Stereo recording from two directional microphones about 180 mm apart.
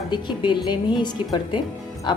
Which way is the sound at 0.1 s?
25° left (ahead or behind).